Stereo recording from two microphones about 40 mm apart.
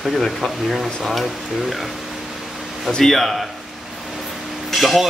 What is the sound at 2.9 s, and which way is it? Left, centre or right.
Hammer, centre.